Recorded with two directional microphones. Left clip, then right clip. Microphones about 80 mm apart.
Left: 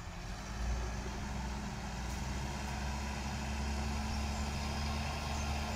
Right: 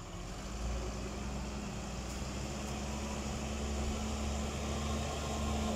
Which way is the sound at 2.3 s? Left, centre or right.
Centre.